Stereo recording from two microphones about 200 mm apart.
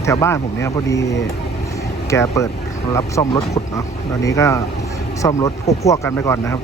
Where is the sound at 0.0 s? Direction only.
15° left (ahead or behind).